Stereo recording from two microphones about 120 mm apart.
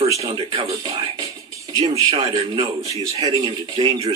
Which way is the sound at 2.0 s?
45° right (ahead or behind).